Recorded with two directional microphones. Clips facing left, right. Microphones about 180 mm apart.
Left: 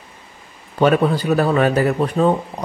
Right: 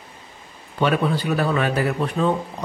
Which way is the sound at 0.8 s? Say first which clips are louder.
Left 5 dB; 40° left (ahead or behind).